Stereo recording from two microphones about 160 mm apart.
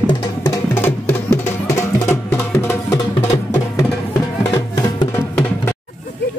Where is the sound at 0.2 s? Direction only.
20° left (ahead or behind).